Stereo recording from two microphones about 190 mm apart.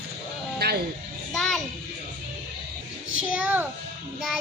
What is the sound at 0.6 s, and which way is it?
Music, 60° right (ahead or behind).